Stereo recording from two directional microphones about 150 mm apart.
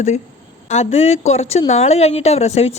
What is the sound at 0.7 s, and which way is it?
A woman's voice, 45° left (ahead or behind).